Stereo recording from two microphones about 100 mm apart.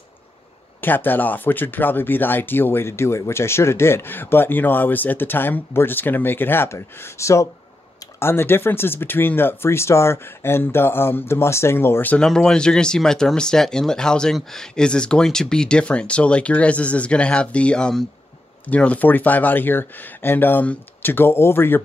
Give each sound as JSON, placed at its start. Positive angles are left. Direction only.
{"t": 0.7, "sound": "speech", "side_deg": 20}
{"t": 12.2, "sound": "speech", "side_deg": 5}